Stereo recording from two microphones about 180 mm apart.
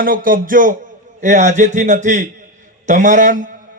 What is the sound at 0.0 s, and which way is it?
Speech, 50° right (ahead or behind).